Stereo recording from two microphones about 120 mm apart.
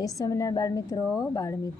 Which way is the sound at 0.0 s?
30° left (ahead or behind).